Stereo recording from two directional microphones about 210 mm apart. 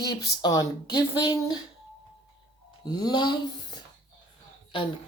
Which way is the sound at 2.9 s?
20° left (ahead or behind).